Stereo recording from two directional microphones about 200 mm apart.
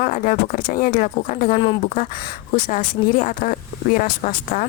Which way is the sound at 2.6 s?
45° left (ahead or behind).